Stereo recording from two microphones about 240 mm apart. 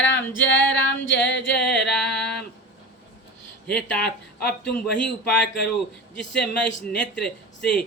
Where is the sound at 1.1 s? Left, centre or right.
Left.